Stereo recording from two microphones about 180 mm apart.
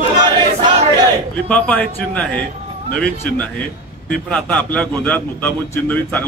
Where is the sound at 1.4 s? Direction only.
5° left (ahead or behind).